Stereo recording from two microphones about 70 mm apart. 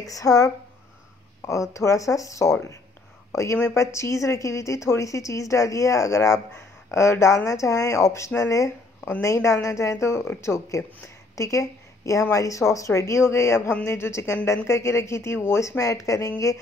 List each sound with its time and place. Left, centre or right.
0.0 s a woman's voice: left
3.6 s a woman's voice: left